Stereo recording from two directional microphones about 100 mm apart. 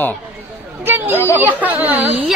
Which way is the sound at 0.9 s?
20° right (ahead or behind).